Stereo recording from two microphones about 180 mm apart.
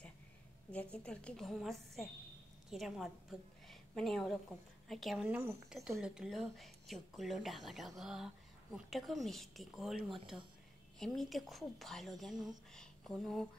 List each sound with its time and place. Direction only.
0.7 s a woman's voice: 5° left (ahead or behind)